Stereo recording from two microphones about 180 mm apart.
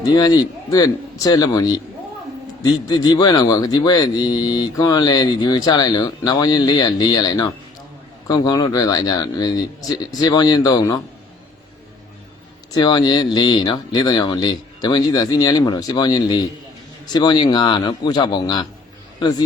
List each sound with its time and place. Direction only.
0.0 s a man's voice: 20° left (ahead or behind)
12.7 s a man's voice: 25° left (ahead or behind)